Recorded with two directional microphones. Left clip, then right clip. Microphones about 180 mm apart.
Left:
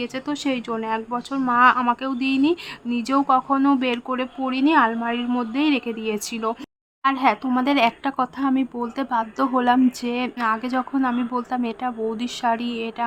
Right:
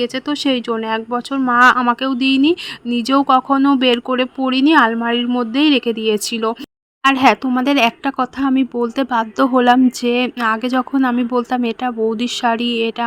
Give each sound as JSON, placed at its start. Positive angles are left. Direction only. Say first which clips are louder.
{"t": 0.0, "sound": "speech", "louder": "right 7 dB", "side_deg": -30}